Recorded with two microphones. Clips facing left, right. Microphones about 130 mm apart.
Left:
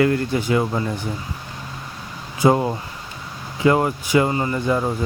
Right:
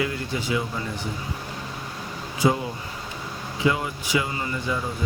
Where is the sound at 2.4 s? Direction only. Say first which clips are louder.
Left 6 dB; 50° left (ahead or behind).